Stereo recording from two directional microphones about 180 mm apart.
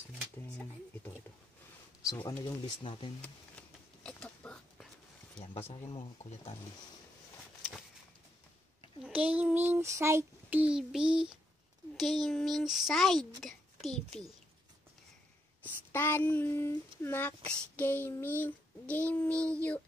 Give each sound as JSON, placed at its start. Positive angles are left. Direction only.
{"t": 2.0, "sound": "speech", "side_deg": 20}
{"t": 3.2, "sound": "a sound", "side_deg": 5}
{"t": 5.4, "sound": "a sound", "side_deg": 35}
{"t": 9.0, "sound": "child singing", "side_deg": -10}
{"t": 12.0, "sound": "speech", "side_deg": 0}
{"t": 15.6, "sound": "speech", "side_deg": 10}